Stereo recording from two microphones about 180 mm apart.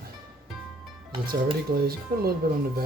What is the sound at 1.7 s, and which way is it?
Speech, 55° right (ahead or behind).